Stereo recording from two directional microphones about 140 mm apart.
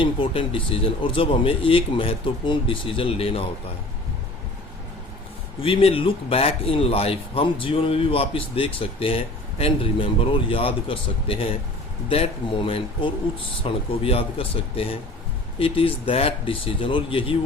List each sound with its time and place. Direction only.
0.0 s speech: 40° left (ahead or behind)
5.6 s speech: 40° left (ahead or behind)